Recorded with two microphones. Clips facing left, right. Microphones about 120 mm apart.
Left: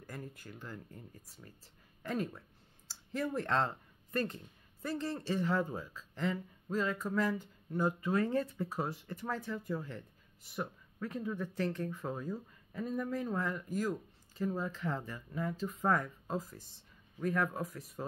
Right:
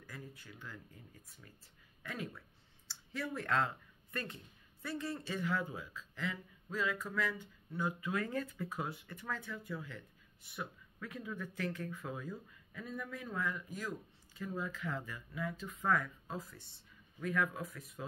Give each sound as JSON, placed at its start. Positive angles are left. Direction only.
{"t": 0.0, "sound": "speech", "side_deg": 45}